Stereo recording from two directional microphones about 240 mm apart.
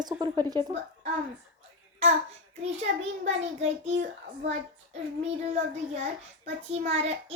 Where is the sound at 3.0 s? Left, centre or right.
Right.